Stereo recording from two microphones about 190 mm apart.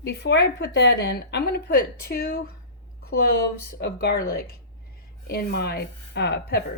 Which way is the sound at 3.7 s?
60° left (ahead or behind).